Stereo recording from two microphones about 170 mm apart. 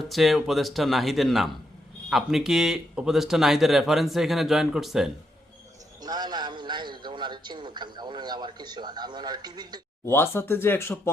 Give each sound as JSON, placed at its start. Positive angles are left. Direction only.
{"t": 0.0, "sound": "speech", "side_deg": 0}
{"t": 6.0, "sound": "a man's voice", "side_deg": -25}
{"t": 10.1, "sound": "speech", "side_deg": 15}